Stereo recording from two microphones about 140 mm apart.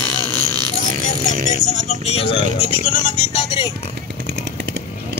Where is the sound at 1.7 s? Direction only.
50° left (ahead or behind).